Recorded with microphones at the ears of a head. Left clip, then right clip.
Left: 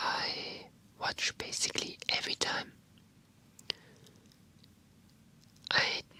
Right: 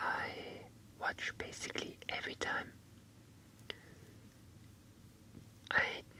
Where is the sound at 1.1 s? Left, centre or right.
Left.